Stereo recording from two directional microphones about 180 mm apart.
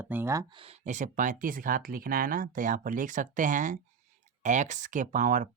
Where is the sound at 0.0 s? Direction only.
10° right (ahead or behind).